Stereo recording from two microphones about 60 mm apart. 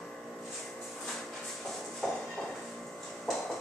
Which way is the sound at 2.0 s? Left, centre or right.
Centre.